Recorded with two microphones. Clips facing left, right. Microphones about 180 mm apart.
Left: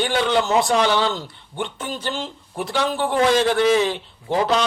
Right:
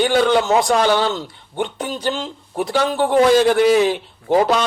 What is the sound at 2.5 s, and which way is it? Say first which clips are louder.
Speech: right 4 dB; 40° right (ahead or behind).